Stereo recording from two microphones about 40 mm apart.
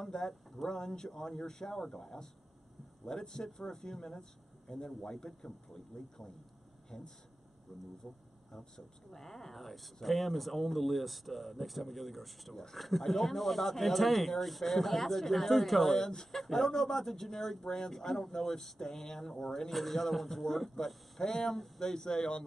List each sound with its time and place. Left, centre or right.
0.0 s speech: centre
15.9 s speech: centre